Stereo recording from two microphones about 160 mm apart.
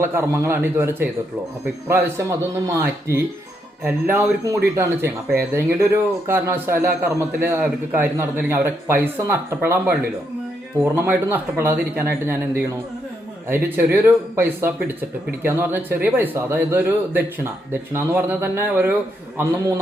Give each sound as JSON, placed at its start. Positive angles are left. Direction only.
{"t": 0.0, "sound": "a man's voice", "side_deg": -15}